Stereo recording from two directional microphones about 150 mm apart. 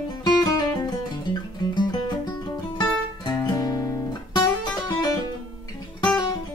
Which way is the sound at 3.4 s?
25° left (ahead or behind).